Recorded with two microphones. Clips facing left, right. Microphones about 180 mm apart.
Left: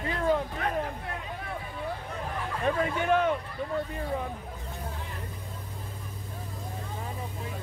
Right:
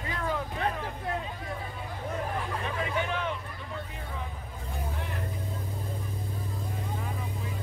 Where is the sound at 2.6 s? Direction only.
50° left (ahead or behind).